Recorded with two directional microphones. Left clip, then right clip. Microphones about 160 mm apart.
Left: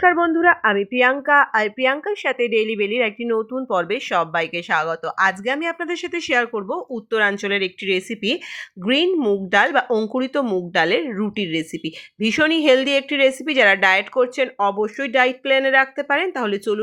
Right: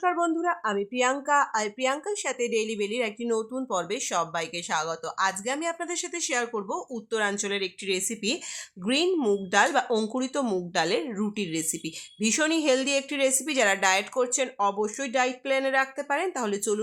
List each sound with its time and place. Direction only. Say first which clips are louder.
0.0 s speech: left 10 dB; 20° left (ahead or behind)